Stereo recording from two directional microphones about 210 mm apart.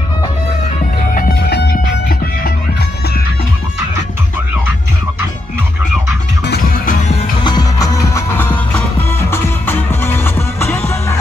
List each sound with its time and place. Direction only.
1.1 s music: 50° left (ahead or behind)
6.4 s music: 45° left (ahead or behind)
7.4 s music: 20° left (ahead or behind)